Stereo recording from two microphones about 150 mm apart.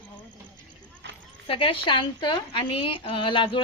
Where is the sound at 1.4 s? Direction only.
35° left (ahead or behind).